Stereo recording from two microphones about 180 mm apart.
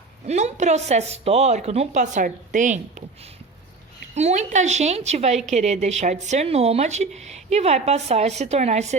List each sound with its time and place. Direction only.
0.3 s speech: 40° right (ahead or behind)
4.1 s speech: 40° right (ahead or behind)